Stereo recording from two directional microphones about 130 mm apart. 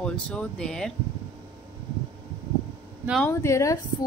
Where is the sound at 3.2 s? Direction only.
20° left (ahead or behind).